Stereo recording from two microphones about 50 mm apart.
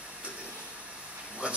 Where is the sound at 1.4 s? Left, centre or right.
Right.